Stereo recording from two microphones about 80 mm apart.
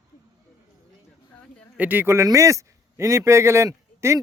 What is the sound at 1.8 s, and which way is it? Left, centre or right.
A man's voice, right.